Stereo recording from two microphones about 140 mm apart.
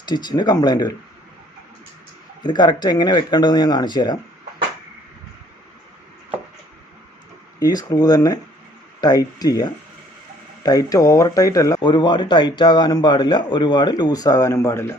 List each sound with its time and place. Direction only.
0.0 s speech: 30° left (ahead or behind)
2.4 s speech: 30° left (ahead or behind)
7.6 s speech: 25° left (ahead or behind)